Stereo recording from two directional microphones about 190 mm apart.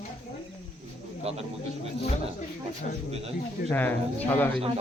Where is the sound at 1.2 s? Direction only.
35° right (ahead or behind).